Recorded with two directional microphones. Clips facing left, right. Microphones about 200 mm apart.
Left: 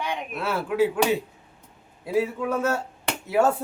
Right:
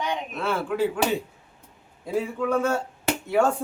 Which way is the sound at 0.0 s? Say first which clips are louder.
Right 1 dB; 5° left (ahead or behind).